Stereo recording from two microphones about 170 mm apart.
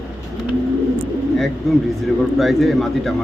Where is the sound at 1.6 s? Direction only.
Centre (ahead or behind).